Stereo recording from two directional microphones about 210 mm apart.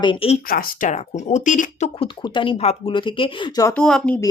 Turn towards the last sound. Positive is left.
turn(degrees=5)  # may be behind; listen again after turning